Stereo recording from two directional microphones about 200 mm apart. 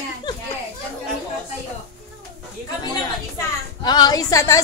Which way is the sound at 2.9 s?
20° left (ahead or behind).